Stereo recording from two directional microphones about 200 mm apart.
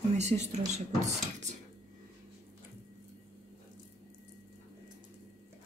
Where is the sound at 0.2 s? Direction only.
35° right (ahead or behind).